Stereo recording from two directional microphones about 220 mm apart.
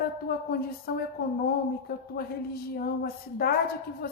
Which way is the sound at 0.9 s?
45° left (ahead or behind).